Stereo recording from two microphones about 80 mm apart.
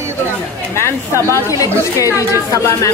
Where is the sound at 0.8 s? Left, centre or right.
Left.